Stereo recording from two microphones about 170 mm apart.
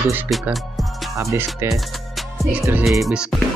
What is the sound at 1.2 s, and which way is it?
Speech, 15° right (ahead or behind).